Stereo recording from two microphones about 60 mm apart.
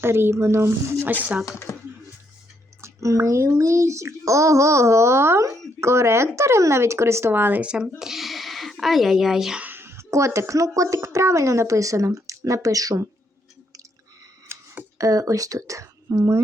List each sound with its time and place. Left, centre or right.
0.0 s speech: right
1.5 s speech: left
2.8 s a child's voice: right
7.6 s speech: centre
9.6 s a sound: right
9.8 s a child's voice: right
14.4 s camera: right
14.9 s a child's voice: right